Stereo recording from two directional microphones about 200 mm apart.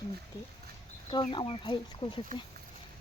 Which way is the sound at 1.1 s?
25° left (ahead or behind).